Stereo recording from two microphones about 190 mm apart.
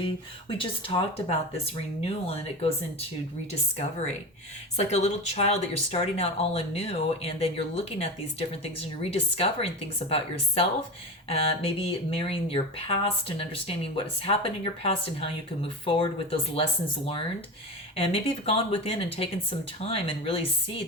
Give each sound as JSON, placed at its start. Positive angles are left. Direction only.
{"t": 0.0, "sound": "speech", "side_deg": 30}
{"t": 4.8, "sound": "speech", "side_deg": 35}
{"t": 17.9, "sound": "speech", "side_deg": 30}